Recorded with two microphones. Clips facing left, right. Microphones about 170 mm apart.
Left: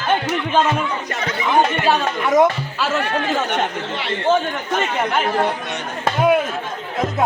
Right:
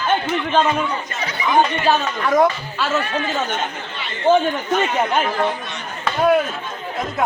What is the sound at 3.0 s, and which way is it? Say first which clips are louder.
Speech: left 2 dB; 70° left (ahead or behind).